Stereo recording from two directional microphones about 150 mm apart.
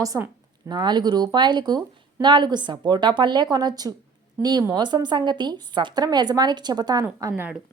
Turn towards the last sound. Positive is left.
turn(degrees=-20)  # may be behind; listen again after turning